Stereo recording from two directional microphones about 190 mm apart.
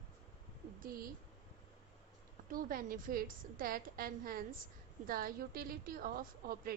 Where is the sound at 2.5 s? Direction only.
45° right (ahead or behind).